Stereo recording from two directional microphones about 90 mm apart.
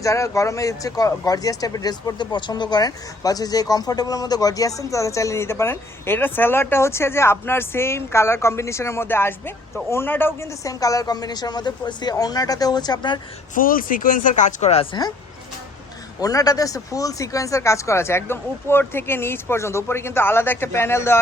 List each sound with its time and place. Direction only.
0.0 s speech: 35° left (ahead or behind)
10.6 s a woman's voice: 40° left (ahead or behind)
14.9 s speech: 55° left (ahead or behind)
16.2 s speech: 40° left (ahead or behind)